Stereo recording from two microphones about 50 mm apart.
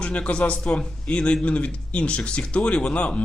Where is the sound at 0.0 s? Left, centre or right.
Left.